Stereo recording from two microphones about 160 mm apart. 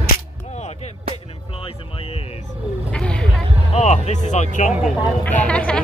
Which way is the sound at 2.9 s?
5° left (ahead or behind).